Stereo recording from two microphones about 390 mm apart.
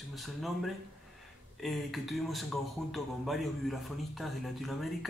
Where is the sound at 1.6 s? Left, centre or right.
Centre.